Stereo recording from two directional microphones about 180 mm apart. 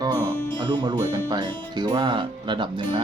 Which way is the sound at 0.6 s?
25° right (ahead or behind).